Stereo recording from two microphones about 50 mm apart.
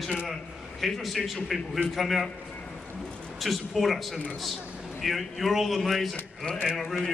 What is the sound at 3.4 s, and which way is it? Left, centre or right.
A man's voice, centre.